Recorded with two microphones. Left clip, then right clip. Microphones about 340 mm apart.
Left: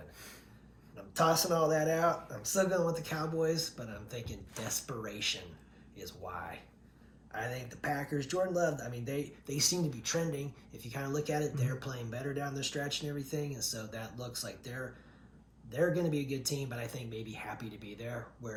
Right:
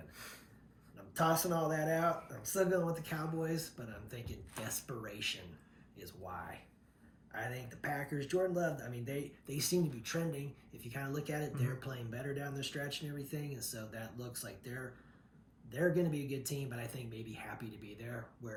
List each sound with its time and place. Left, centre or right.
0.9 s speech: centre
7.3 s speech: centre